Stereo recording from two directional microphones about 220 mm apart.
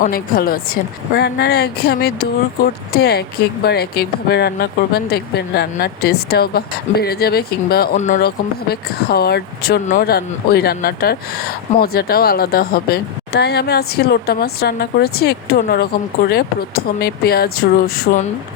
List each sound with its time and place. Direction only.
0.0 s speech: 40° left (ahead or behind)
7.9 s speech: 35° left (ahead or behind)
8.7 s speech: 45° left (ahead or behind)